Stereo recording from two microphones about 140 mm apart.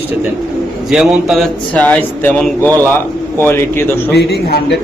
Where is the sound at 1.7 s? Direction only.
10° left (ahead or behind).